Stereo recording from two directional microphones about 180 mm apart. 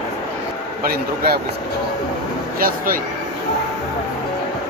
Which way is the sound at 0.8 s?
60° right (ahead or behind).